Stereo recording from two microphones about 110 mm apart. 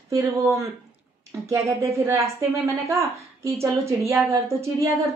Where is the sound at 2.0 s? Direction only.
25° right (ahead or behind).